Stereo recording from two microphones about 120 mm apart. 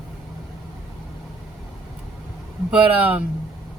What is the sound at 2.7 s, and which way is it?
Speech, 10° right (ahead or behind).